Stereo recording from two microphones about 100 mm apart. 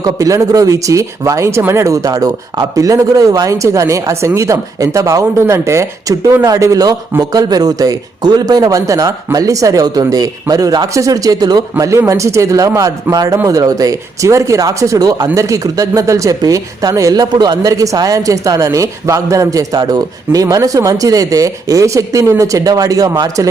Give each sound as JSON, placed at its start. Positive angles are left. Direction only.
{"t": 0.0, "sound": "speech", "side_deg": -35}
{"t": 11.8, "sound": "speech", "side_deg": -30}